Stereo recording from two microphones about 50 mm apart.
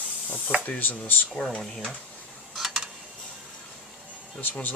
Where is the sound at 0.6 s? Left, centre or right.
Left.